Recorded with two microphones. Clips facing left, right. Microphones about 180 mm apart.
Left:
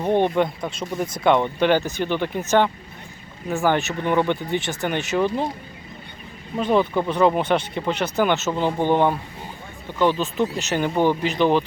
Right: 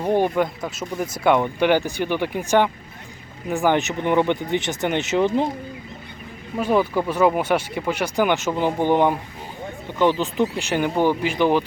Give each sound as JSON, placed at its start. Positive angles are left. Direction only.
{"t": 0.0, "sound": "speech", "side_deg": -10}
{"t": 6.6, "sound": "speech", "side_deg": -10}